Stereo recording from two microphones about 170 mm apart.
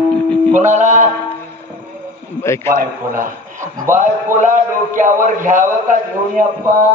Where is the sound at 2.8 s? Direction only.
55° right (ahead or behind).